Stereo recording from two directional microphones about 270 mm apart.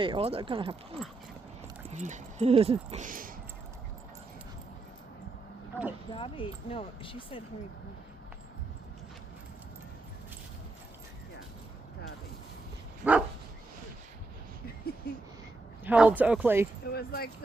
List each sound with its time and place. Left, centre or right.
0.0 s speech: centre
6.1 s speech: centre
13.0 s dog: centre
15.8 s speech: centre
16.8 s speech: left